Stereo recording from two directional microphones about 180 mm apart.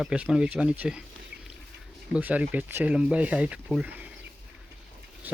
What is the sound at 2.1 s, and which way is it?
Speech, 10° right (ahead or behind).